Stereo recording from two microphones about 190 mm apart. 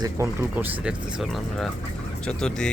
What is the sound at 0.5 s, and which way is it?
Speech, 5° right (ahead or behind).